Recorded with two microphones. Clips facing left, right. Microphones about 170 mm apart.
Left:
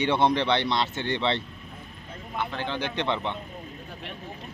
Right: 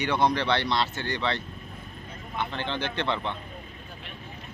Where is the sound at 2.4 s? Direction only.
5° left (ahead or behind).